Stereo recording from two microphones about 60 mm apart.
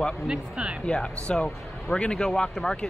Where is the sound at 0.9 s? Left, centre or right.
Centre.